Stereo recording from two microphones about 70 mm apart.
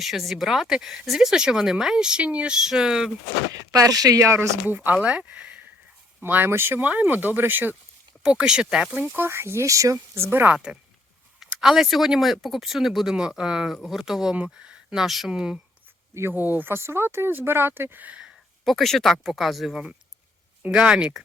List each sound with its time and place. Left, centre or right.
0.0 s speech: centre
3.7 s speech: right
4.3 s speech: right
6.2 s speech: right
6.8 s speech: right
8.2 s speech: centre
9.1 s speech: right
10.2 s speech: right
10.5 s speech: centre
16.3 s speech: right
18.6 s speech: centre